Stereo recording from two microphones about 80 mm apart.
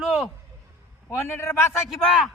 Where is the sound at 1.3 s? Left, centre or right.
Left.